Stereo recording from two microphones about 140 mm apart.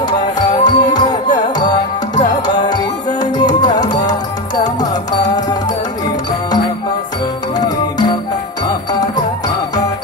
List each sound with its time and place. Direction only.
0.5 s music: 30° left (ahead or behind)
7.5 s music: 30° left (ahead or behind)